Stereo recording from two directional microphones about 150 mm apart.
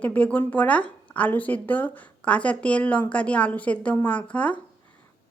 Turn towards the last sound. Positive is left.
turn(degrees=10)  # may be behind; listen again after turning